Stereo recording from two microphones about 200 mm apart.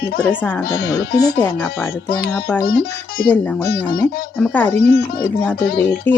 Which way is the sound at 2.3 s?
10° left (ahead or behind).